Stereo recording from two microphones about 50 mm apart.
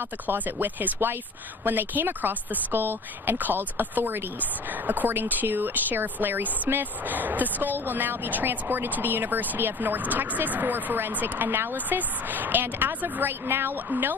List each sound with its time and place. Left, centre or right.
0.3 s speech: right